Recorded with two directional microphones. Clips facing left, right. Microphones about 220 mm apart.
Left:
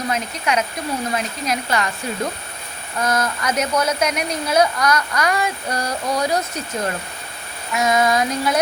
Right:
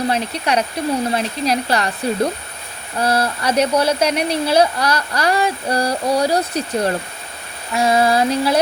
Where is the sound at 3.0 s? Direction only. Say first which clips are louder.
Right 3 dB; 30° right (ahead or behind).